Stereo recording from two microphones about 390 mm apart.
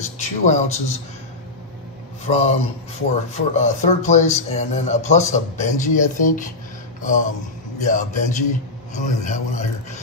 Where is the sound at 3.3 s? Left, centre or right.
Centre.